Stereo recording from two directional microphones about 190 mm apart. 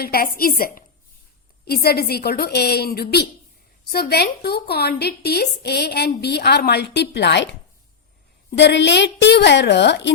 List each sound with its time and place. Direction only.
0.0 s a woman's voice: 50° left (ahead or behind)